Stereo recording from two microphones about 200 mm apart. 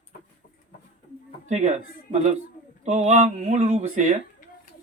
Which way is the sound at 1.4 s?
35° right (ahead or behind).